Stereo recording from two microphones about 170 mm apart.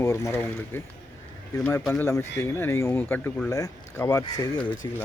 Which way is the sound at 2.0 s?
15° left (ahead or behind).